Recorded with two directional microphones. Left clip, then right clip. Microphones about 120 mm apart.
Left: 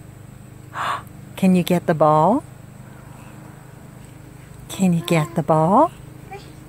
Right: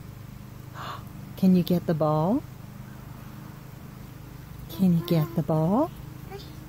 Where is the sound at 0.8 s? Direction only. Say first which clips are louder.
Left 14 dB; 5° left (ahead or behind).